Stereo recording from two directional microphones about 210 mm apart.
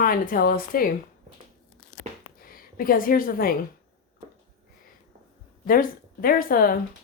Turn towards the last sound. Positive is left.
turn(degrees=45)  # may be behind; listen again after turning